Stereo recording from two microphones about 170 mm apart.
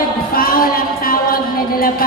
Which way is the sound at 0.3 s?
60° left (ahead or behind).